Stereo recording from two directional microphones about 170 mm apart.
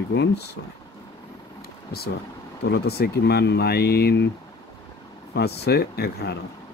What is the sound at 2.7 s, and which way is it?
Speech, 70° left (ahead or behind).